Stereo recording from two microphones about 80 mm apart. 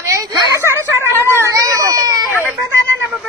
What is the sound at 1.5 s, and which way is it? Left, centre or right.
Baby cry, right.